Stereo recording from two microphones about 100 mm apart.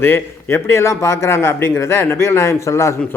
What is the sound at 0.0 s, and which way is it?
A man's voice, 25° left (ahead or behind).